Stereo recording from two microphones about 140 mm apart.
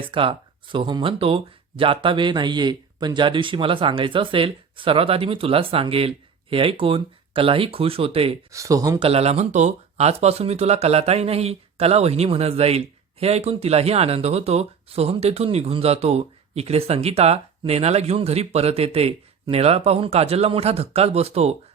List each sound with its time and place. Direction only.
0.1 s speech: 40° right (ahead or behind)
8.5 s speech: 25° right (ahead or behind)
9.0 s speech: 45° right (ahead or behind)